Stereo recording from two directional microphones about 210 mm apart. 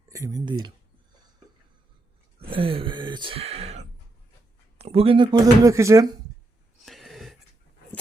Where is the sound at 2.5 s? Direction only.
25° right (ahead or behind).